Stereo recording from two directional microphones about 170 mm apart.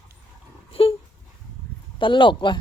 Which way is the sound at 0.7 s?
35° left (ahead or behind).